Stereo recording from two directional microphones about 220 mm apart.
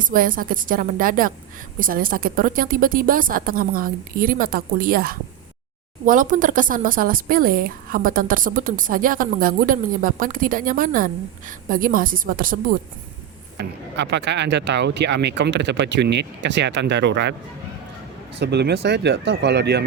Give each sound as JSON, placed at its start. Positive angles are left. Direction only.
{"t": 0.1, "sound": "speech", "side_deg": -40}
{"t": 13.6, "sound": "speech", "side_deg": -50}
{"t": 18.3, "sound": "speech", "side_deg": -50}